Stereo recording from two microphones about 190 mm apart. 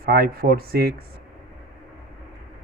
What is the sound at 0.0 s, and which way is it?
Speech, 55° right (ahead or behind).